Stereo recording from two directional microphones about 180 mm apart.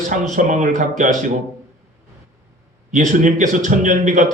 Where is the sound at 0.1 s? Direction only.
45° right (ahead or behind).